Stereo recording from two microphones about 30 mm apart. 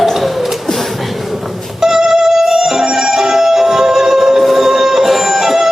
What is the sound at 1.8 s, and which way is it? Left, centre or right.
Music, centre.